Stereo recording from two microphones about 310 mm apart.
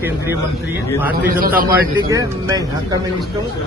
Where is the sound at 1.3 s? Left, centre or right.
Right.